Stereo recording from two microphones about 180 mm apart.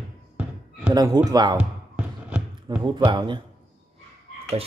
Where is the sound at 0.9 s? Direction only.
20° right (ahead or behind).